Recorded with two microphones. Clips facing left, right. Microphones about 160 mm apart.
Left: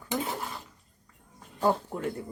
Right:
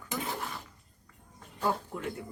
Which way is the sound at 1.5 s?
35° left (ahead or behind).